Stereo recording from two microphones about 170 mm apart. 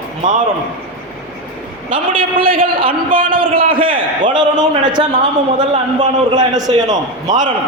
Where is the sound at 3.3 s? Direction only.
30° right (ahead or behind).